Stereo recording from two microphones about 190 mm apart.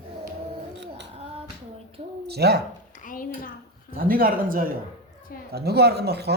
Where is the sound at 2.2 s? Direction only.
60° right (ahead or behind).